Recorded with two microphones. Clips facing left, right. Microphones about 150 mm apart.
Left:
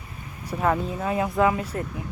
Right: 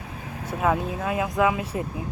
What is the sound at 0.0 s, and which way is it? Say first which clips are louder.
Vehicle: right 5 dB; 90° right.